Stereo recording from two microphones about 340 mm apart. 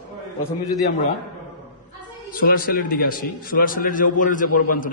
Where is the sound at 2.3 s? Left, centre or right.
Left.